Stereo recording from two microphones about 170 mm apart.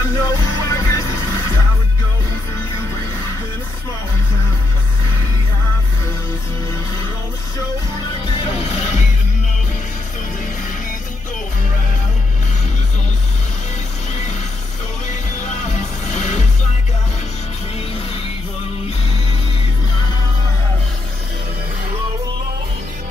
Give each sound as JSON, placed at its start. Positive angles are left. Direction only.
{"t": 0.2, "sound": "music", "side_deg": 20}
{"t": 8.3, "sound": "music", "side_deg": 40}
{"t": 15.0, "sound": "music", "side_deg": 45}